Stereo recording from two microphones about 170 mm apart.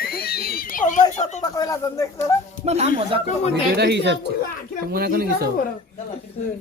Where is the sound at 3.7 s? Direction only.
80° right.